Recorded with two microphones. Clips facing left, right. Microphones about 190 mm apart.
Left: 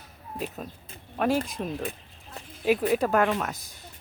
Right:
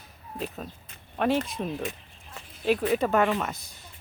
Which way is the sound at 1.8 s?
35° left (ahead or behind).